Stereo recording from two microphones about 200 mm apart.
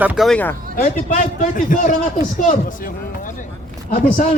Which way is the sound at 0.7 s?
40° left (ahead or behind).